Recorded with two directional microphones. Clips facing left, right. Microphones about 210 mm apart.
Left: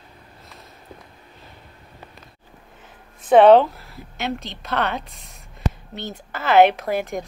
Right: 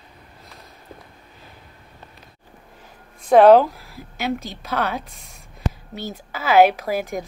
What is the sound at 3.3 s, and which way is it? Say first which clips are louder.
Speech: even; 5° right (ahead or behind).